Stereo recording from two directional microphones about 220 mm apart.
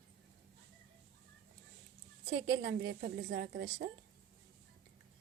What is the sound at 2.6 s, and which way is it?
Speech, 45° right (ahead or behind).